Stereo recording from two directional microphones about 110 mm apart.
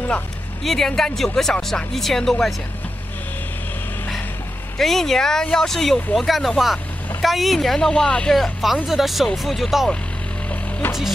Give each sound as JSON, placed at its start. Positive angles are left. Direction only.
{"t": 0.7, "sound": "speech", "side_deg": 5}
{"t": 4.7, "sound": "speech", "side_deg": 5}
{"t": 10.5, "sound": "music", "side_deg": 20}